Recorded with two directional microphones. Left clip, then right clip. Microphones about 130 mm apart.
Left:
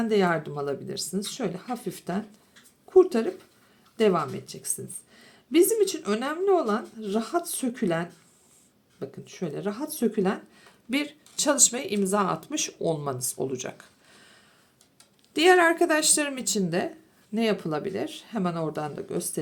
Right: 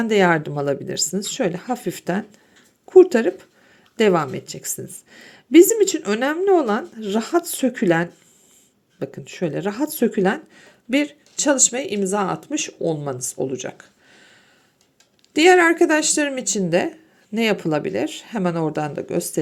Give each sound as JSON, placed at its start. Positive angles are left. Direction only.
{"t": 0.1, "sound": "speech", "side_deg": -50}